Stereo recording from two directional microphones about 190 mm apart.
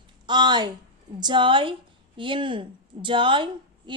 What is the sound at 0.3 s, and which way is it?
A woman's voice, 25° right (ahead or behind).